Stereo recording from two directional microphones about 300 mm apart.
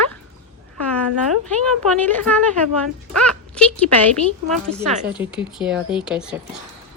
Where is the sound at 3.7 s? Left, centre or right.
Centre.